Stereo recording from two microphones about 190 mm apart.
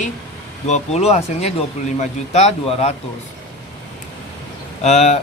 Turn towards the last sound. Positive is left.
turn(degrees=35)  # may be behind; listen again after turning